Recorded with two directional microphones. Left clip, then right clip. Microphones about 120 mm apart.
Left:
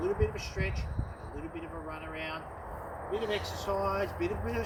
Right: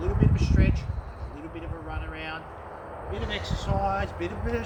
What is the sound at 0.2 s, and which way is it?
Speech, 15° right (ahead or behind).